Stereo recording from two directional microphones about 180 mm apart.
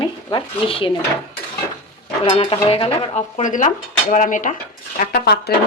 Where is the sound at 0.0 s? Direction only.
25° left (ahead or behind).